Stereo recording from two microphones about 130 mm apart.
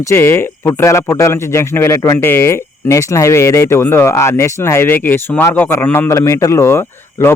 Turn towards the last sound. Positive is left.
turn(degrees=15)  # may be behind; listen again after turning